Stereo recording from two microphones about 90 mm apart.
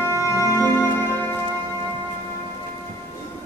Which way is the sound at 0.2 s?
35° left (ahead or behind).